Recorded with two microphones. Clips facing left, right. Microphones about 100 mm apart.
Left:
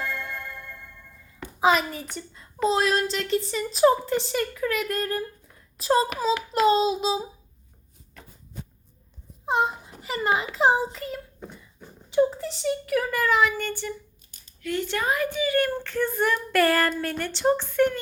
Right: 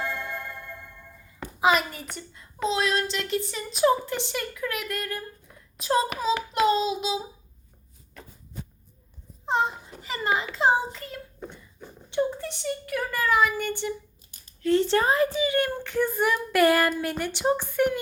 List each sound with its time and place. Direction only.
0.0 s music: centre (ahead or behind)
1.6 s speech: centre (ahead or behind)
4.9 s child singing: 35° left (ahead or behind)
6.0 s speech: centre (ahead or behind)
6.8 s child singing: 35° left (ahead or behind)
9.5 s a sound: 5° left (ahead or behind)
10.2 s a child's voice: 5° left (ahead or behind)
13.7 s speech: 20° right (ahead or behind)
14.6 s speech: 30° right (ahead or behind); by 18.0 s 10° right (ahead or behind)